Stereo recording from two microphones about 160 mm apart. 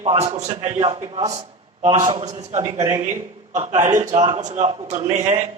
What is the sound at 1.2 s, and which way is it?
Speech, 25° right (ahead or behind).